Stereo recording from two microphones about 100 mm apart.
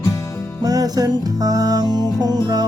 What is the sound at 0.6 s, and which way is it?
Music, 40° right (ahead or behind).